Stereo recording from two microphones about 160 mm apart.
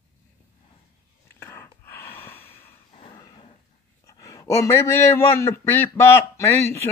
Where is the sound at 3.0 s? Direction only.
30° left (ahead or behind).